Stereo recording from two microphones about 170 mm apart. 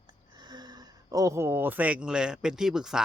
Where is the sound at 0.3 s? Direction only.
25° right (ahead or behind).